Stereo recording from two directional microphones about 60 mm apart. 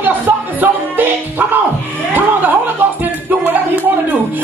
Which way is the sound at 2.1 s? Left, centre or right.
Right.